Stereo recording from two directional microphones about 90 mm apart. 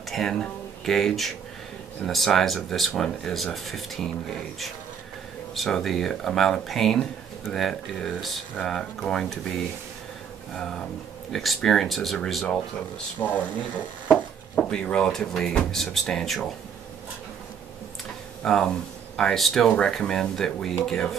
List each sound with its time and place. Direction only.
0.1 s speech: 5° left (ahead or behind)
5.5 s speech: 5° left (ahead or behind)
10.5 s speech: 5° left (ahead or behind)
13.2 s speech: 25° left (ahead or behind)
14.1 s speech: 5° left (ahead or behind)
18.4 s speech: 10° left (ahead or behind)